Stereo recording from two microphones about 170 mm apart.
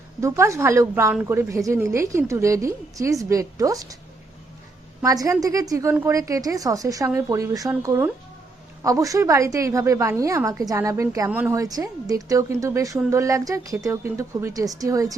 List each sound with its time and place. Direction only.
0.2 s a woman's voice: 15° right (ahead or behind)
5.0 s a woman's voice: 20° right (ahead or behind)